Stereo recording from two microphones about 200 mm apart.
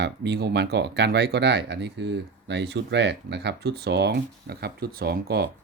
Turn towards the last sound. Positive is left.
turn(degrees=-50)  # may be behind; listen again after turning